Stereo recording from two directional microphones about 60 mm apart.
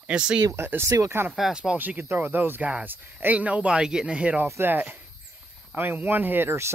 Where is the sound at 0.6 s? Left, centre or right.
Right.